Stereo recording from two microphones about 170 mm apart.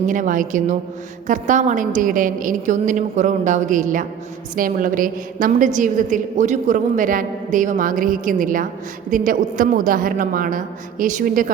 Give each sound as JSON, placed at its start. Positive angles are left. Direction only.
{"t": 0.1, "sound": "a woman's voice", "side_deg": -50}